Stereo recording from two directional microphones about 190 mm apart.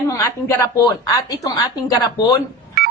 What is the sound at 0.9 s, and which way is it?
Speech, 20° left (ahead or behind).